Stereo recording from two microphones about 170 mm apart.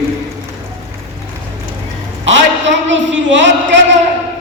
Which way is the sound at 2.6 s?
90° right.